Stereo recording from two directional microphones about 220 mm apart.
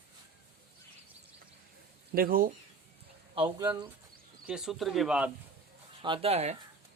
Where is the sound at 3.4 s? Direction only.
15° right (ahead or behind).